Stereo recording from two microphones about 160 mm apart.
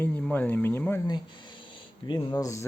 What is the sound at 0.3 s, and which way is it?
Speech, 10° left (ahead or behind).